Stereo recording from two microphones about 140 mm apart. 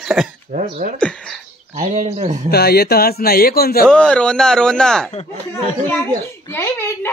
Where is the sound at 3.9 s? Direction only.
5° left (ahead or behind).